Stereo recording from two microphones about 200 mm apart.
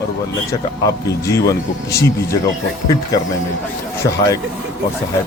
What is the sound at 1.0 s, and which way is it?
Speech, 15° left (ahead or behind).